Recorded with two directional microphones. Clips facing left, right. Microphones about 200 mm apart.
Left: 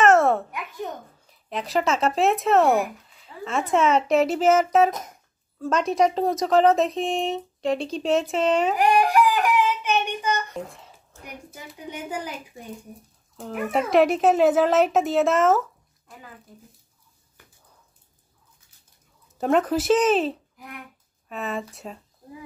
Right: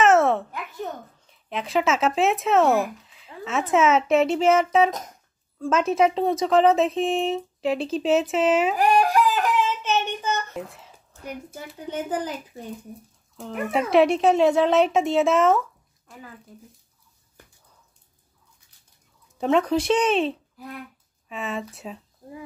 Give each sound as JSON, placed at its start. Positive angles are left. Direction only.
{"t": 0.0, "sound": "babbling", "side_deg": 0}
{"t": 1.3, "sound": "speech", "side_deg": 0}
{"t": 3.3, "sound": "a sound", "side_deg": 0}
{"t": 3.7, "sound": "speech", "side_deg": 0}
{"t": 8.7, "sound": "a sound", "side_deg": 15}
{"t": 9.8, "sound": "child singing", "side_deg": 15}
{"t": 11.5, "sound": "a child's voice", "side_deg": 10}
{"t": 13.4, "sound": "speech", "side_deg": 0}
{"t": 19.3, "sound": "speech", "side_deg": 5}